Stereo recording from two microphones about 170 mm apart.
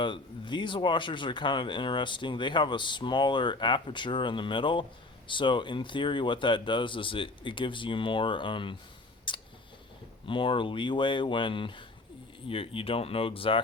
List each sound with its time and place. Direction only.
0.0 s speech: 30° left (ahead or behind)
9.3 s scissors: 30° left (ahead or behind)
10.2 s speech: 30° left (ahead or behind)